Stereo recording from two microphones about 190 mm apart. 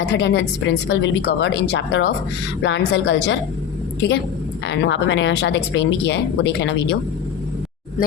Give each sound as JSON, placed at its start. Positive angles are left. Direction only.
{"t": 0.1, "sound": "speech", "side_deg": 70}
{"t": 4.6, "sound": "speech", "side_deg": 70}